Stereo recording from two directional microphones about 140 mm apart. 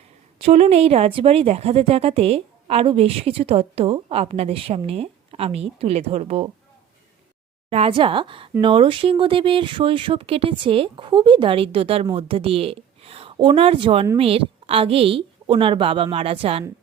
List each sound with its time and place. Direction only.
0.3 s speech: 45° right (ahead or behind)
7.7 s a woman's voice: 45° right (ahead or behind)